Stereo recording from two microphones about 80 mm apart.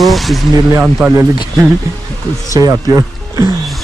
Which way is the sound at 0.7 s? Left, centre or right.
Right.